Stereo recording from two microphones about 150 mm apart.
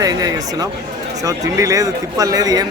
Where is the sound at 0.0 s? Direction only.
25° right (ahead or behind).